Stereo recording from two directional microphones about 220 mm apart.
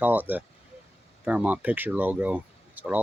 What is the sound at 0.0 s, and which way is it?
Speech, 10° right (ahead or behind).